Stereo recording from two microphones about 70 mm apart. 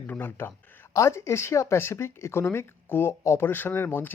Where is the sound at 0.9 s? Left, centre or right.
Left.